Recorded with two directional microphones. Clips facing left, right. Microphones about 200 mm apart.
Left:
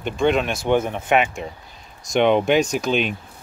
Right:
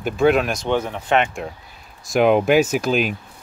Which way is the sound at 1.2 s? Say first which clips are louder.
Right 1 dB; centre (ahead or behind).